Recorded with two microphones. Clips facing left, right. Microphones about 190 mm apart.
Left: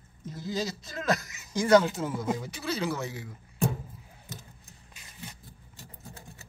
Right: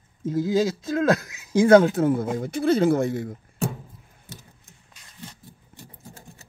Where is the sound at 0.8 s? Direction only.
55° right (ahead or behind).